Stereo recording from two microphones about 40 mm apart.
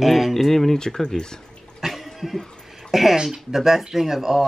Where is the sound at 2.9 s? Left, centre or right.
Centre.